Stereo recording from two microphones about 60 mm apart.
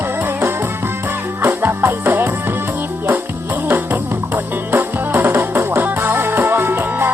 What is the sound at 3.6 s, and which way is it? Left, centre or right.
Music, right.